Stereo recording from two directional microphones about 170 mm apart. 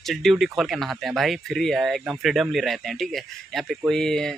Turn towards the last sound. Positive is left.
turn(degrees=5)  # may be behind; listen again after turning